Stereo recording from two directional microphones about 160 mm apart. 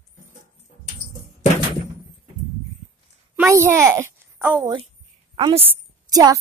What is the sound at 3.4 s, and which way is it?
A child's voice, 15° right (ahead or behind).